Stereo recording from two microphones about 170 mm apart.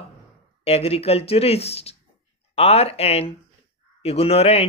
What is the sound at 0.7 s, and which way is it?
Speech, 35° left (ahead or behind).